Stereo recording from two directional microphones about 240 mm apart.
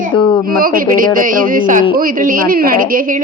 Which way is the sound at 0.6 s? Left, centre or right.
Right.